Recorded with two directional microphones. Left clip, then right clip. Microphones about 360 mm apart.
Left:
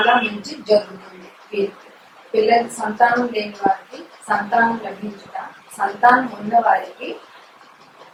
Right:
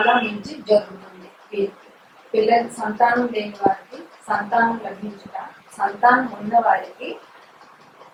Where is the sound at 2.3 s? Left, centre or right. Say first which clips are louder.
Left 2 dB; centre.